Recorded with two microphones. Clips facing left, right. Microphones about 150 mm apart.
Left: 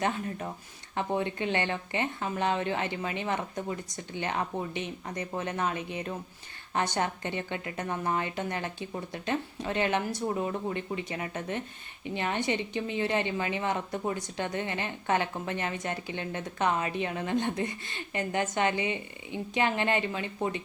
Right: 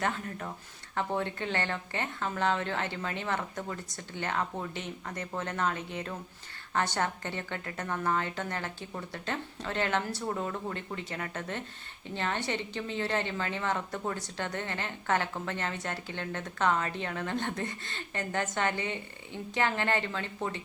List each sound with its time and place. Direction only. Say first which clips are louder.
0.0 s a woman's voice: left 3 dB; 20° left (ahead or behind)